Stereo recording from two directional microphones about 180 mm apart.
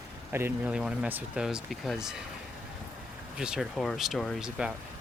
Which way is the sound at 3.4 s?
5° right (ahead or behind).